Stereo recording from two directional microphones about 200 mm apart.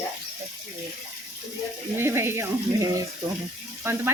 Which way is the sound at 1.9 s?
10° right (ahead or behind).